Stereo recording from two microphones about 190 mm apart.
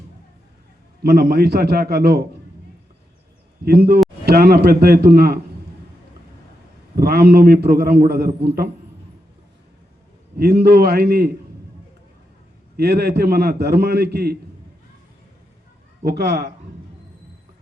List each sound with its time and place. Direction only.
1.0 s a man's voice: 60° right (ahead or behind)
3.7 s a man's voice: 55° right (ahead or behind)
6.9 s a man's voice: 55° right (ahead or behind)
10.3 s a man's voice: 55° right (ahead or behind)
12.7 s a man's voice: 55° right (ahead or behind)
16.0 s a man's voice: 60° right (ahead or behind)